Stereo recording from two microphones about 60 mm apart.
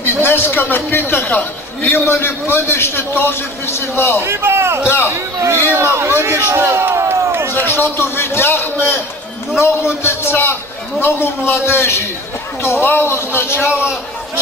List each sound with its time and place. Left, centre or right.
0.0 s a man's voice: left
2.0 s a man's voice: left
4.2 s speech: right
4.8 s a man's voice: left
5.7 s a man's voice: right
7.5 s a man's voice: left